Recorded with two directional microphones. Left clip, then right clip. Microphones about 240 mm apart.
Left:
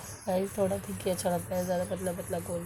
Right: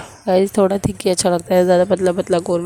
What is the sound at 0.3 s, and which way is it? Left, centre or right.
A woman's voice, right.